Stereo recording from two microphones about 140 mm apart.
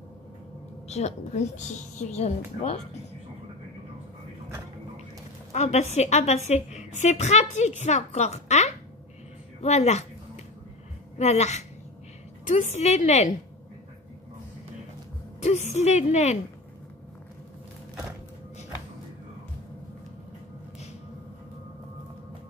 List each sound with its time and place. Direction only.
0.8 s a woman's voice: 50° left (ahead or behind)
5.5 s a woman's voice: 55° left (ahead or behind)
9.6 s a sound: 50° left (ahead or behind)
11.1 s a woman's voice: 55° left (ahead or behind)
15.4 s a woman's voice: 55° left (ahead or behind)